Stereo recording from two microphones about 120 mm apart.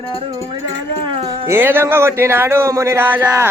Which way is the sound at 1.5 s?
20° right (ahead or behind).